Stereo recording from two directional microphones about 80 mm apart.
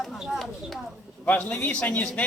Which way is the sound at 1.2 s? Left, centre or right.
Left.